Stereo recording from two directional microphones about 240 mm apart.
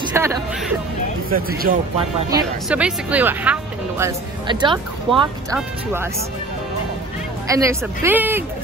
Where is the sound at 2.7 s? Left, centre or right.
Centre.